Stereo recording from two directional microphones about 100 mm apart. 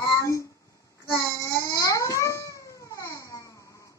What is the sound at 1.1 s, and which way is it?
Babbling, 35° left (ahead or behind).